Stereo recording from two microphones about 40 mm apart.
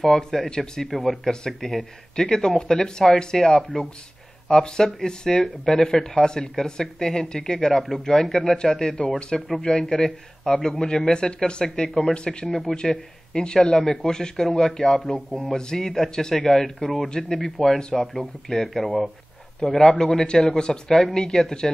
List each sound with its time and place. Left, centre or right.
0.2 s speech: centre
1.2 s speech: centre
12.4 s speech: centre
13.3 s speech: left
15.3 s speech: centre